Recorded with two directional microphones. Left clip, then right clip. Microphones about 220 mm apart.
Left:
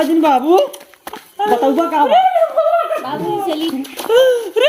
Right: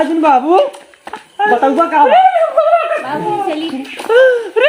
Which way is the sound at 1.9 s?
45° left (ahead or behind).